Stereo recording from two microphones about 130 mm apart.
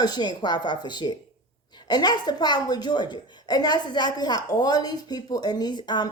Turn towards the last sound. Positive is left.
turn(degrees=35)  # may be behind; listen again after turning